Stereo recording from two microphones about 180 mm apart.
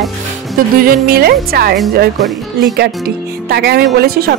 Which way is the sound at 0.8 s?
55° right (ahead or behind).